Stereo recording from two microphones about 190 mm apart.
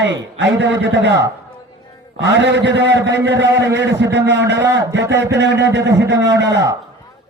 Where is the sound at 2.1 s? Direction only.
65° right (ahead or behind).